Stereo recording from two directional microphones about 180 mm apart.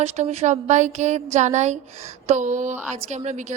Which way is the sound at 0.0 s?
35° right (ahead or behind).